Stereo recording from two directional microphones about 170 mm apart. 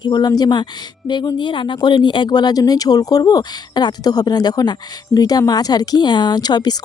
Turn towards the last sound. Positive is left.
turn(degrees=25)  # may be behind; listen again after turning